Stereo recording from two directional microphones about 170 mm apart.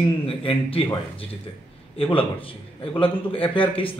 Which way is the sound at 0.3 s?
35° left (ahead or behind).